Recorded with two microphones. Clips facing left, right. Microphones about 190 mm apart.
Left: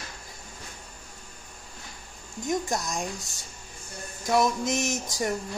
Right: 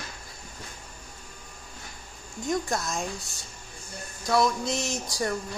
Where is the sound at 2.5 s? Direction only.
15° left (ahead or behind).